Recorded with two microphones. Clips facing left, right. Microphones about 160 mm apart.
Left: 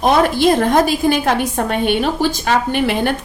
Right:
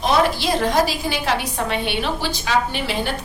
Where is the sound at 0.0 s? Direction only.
55° left (ahead or behind).